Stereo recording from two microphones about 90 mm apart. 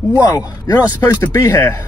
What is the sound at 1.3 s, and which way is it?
Speech, 35° left (ahead or behind).